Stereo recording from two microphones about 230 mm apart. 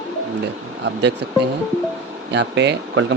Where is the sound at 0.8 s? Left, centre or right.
Right.